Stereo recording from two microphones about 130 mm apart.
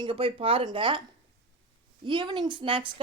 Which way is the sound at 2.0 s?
35° right (ahead or behind).